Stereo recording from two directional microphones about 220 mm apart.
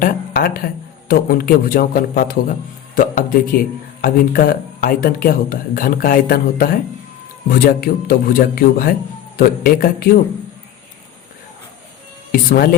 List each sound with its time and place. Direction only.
0.0 s a man's voice: 40° left (ahead or behind)
12.3 s speech: 40° left (ahead or behind)